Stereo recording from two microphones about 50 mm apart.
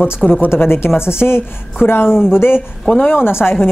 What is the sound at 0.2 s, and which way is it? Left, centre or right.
Speech, left.